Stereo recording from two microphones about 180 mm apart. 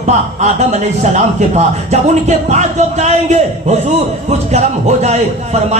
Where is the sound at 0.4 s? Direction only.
40° right (ahead or behind).